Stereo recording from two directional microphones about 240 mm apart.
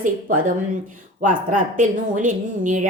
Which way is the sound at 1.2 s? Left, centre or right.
Right.